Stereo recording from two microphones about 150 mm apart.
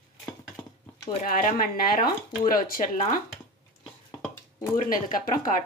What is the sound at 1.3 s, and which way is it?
Speech, 70° left (ahead or behind).